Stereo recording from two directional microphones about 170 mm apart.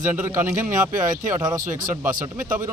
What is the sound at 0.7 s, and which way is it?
Speech, 50° right (ahead or behind).